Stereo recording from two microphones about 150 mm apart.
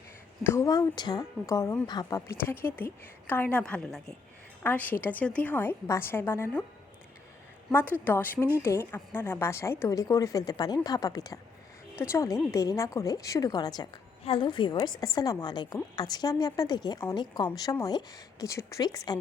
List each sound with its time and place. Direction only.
0.4 s a woman's voice: 20° left (ahead or behind)
1.9 s a woman's voice: 25° left (ahead or behind)
2.5 s a woman's voice: 15° left (ahead or behind)
7.7 s a woman's voice: 15° left (ahead or behind)